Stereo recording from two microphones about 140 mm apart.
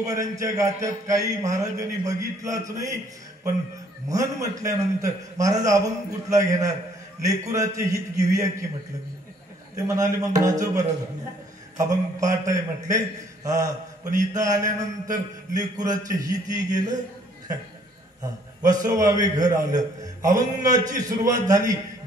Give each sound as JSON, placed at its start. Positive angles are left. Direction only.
{"t": 0.0, "sound": "a man's voice", "side_deg": -25}
{"t": 4.1, "sound": "a man's voice", "side_deg": -25}
{"t": 9.8, "sound": "a man's voice", "side_deg": -25}
{"t": 18.7, "sound": "a man's voice", "side_deg": -25}